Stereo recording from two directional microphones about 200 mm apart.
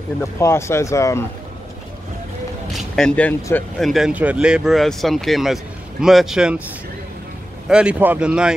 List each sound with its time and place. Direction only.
0.2 s speech: 15° left (ahead or behind)
3.0 s speech: 5° left (ahead or behind)
7.6 s speech: 5° right (ahead or behind)